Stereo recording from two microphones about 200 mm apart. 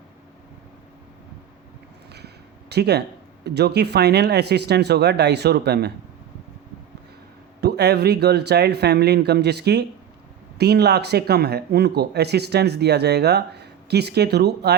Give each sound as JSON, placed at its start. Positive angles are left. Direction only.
{"t": 2.1, "sound": "a sound", "side_deg": -55}
{"t": 3.4, "sound": "speech", "side_deg": -55}
{"t": 7.6, "sound": "speech", "side_deg": -55}